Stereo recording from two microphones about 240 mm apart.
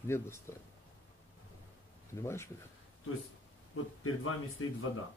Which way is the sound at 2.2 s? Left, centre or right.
Centre.